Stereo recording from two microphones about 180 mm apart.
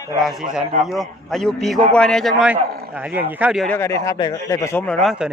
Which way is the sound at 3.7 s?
15° left (ahead or behind).